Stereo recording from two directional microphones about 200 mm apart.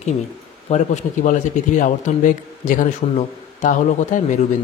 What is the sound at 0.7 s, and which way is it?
A man's voice, 35° left (ahead or behind).